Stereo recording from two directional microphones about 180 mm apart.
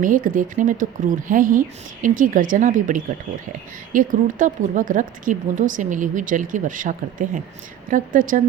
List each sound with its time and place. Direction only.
0.0 s speech: 50° right (ahead or behind)